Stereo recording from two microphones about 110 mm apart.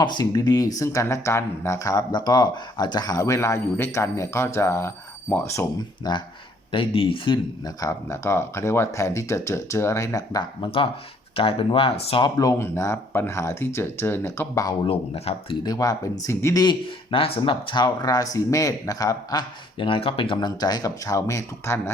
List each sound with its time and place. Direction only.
0.0 s speech: 40° left (ahead or behind); by 5.4 s 20° left (ahead or behind)
6.0 s speech: 40° left (ahead or behind)
6.7 s speech: 55° left (ahead or behind)
7.8 s speech: 25° left (ahead or behind)
10.6 s speech: 50° left (ahead or behind)
12.4 s speech: 25° left (ahead or behind)
14.8 s speech: 60° left (ahead or behind)
15.6 s speech: 35° left (ahead or behind)
16.6 s speech: 55° left (ahead or behind); by 21.8 s 30° left (ahead or behind)